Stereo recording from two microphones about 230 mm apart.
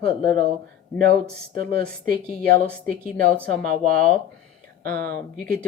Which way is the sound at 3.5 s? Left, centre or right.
Right.